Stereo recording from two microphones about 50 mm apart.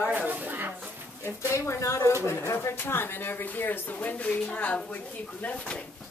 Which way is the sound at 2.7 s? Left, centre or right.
Left.